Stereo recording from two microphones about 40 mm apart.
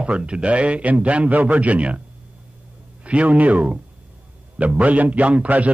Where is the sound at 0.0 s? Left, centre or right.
Right.